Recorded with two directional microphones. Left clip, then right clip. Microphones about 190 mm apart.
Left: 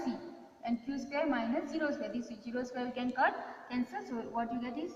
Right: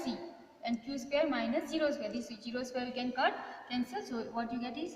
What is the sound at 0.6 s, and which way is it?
Speech, 50° right (ahead or behind).